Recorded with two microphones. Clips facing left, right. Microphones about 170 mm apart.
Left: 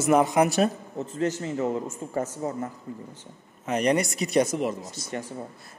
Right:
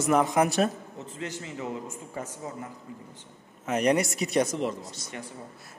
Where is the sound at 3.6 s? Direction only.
5° right (ahead or behind).